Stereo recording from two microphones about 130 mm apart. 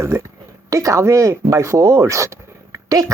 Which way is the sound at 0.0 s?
20° right (ahead or behind).